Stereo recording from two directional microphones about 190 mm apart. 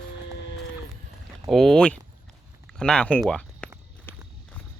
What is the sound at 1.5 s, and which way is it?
Speech, centre (ahead or behind).